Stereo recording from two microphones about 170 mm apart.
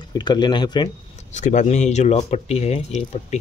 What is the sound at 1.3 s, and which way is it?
Speech, 45° left (ahead or behind).